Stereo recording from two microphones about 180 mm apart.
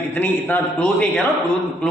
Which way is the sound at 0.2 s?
10° left (ahead or behind).